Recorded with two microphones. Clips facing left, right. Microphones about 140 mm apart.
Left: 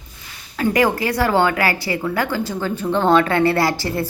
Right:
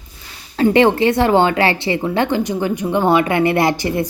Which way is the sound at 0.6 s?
25° right (ahead or behind).